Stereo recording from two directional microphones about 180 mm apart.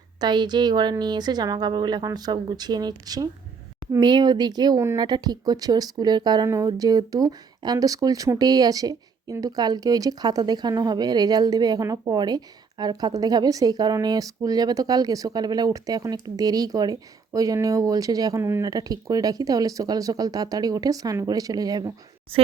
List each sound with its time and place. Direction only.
0.2 s speech: 25° right (ahead or behind)